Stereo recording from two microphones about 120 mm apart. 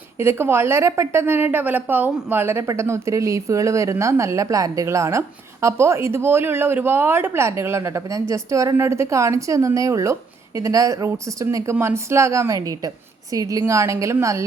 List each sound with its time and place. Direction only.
0.2 s speech: 20° right (ahead or behind)